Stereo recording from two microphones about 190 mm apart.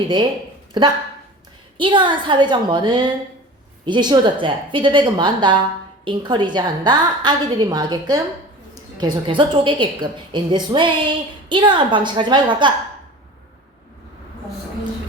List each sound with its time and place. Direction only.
0.8 s a woman's voice: 25° right (ahead or behind)